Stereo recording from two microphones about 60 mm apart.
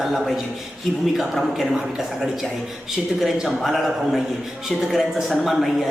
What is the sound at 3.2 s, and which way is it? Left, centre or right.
A man's voice, centre.